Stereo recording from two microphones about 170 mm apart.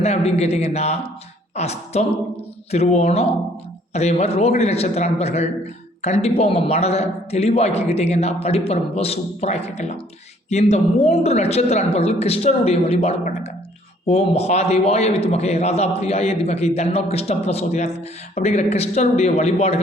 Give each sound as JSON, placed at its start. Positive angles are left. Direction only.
{"t": 0.0, "sound": "a man's voice", "side_deg": 40}